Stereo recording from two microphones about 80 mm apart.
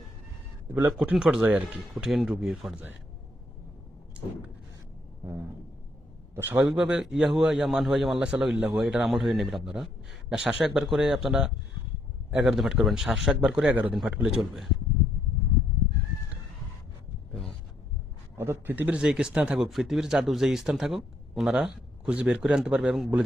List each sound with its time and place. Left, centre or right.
0.7 s a man's voice: centre
1.1 s a man's voice: centre
1.5 s a man's voice: centre
2.0 s speech: centre
6.3 s a man's voice: right
6.7 s a man's voice: centre
18.3 s a man's voice: right
19.0 s speech: centre
21.5 s a man's voice: centre